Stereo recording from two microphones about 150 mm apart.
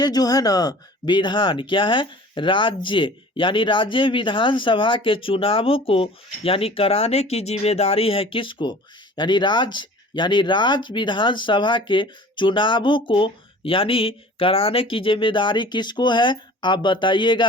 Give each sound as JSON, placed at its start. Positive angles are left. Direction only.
{"t": 0.0, "sound": "speech", "side_deg": 25}